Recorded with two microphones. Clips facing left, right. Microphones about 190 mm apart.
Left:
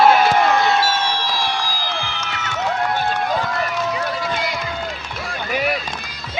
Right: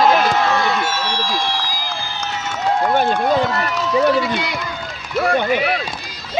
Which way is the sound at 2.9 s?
60° right (ahead or behind).